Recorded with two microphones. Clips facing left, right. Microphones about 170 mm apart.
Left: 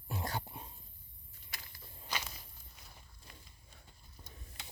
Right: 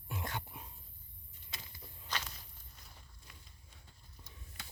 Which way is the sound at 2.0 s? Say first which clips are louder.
Left 1 dB; 10° left (ahead or behind).